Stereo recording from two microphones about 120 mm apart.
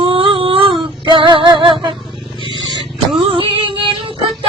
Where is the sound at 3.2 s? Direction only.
45° right (ahead or behind).